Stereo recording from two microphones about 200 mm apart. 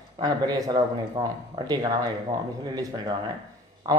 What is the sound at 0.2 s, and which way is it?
Speech, 20° right (ahead or behind).